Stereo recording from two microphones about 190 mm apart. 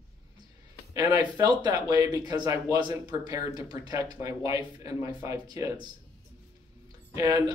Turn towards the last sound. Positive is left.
turn(degrees=-20)  # may be behind; listen again after turning